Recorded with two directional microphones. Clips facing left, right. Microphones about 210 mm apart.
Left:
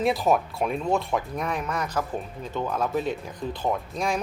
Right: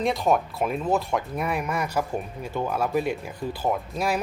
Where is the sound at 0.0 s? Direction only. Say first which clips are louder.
Even; 5° left (ahead or behind).